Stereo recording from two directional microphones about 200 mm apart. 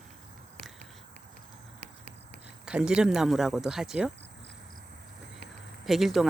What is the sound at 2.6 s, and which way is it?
Speech, 5° right (ahead or behind).